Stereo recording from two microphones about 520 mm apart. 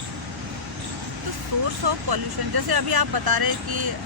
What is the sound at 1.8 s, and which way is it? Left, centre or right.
Speech, right.